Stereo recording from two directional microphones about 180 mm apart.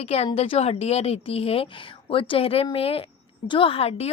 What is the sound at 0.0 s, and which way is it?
Speech, 30° left (ahead or behind).